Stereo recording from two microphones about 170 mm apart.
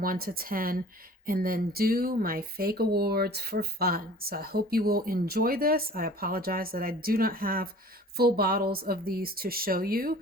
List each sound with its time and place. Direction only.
0.0 s speech: 55° right (ahead or behind)